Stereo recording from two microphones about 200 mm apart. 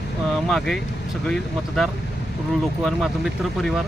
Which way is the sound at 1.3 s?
Centre (ahead or behind).